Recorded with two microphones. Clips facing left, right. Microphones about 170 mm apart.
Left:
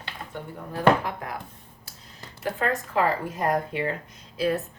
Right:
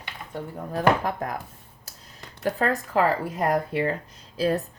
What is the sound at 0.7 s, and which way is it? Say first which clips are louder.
Speech: left 1 dB; 40° right (ahead or behind).